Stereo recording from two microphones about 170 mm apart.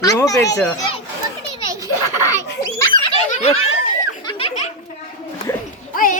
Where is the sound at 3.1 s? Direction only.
40° left (ahead or behind).